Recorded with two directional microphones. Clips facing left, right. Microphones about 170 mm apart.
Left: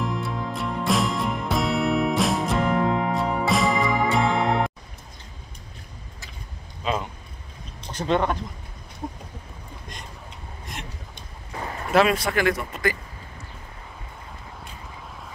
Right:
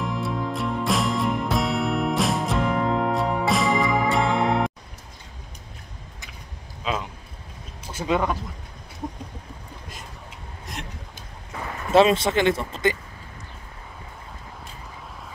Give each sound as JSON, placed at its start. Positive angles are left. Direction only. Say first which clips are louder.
{"t": 0.0, "sound": "music", "louder": "right 1 dB", "side_deg": 0}
{"t": 6.8, "sound": "a sound", "louder": "left 1 dB", "side_deg": 0}
{"t": 7.8, "sound": "speech", "louder": "left 1 dB", "side_deg": -5}
{"t": 10.6, "sound": "vehicle", "louder": "right 2 dB", "side_deg": 0}
{"t": 11.9, "sound": "speech", "louder": "right 3 dB", "side_deg": -25}